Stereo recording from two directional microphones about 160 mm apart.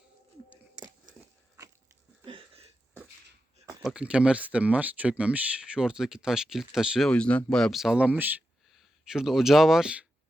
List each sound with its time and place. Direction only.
2.2 s a sound: 35° right (ahead or behind)
3.8 s speech: 5° right (ahead or behind)
7.1 s speech: 5° left (ahead or behind)